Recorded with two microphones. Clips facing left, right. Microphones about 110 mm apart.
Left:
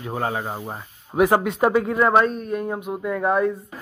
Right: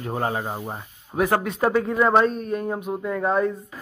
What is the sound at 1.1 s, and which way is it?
Speech, 15° left (ahead or behind).